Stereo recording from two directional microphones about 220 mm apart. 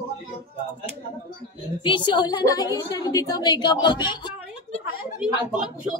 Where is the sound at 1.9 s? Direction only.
20° left (ahead or behind).